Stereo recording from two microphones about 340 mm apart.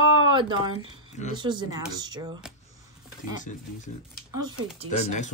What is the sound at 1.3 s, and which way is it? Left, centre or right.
Speech, centre.